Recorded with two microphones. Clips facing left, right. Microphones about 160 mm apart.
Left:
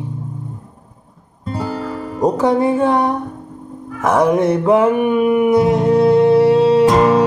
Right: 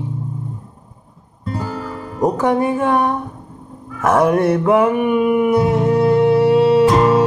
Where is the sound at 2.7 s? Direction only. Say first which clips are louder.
Left 2 dB; 20° left (ahead or behind).